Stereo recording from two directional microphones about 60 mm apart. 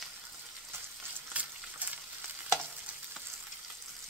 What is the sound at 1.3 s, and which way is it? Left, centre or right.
Frying, right.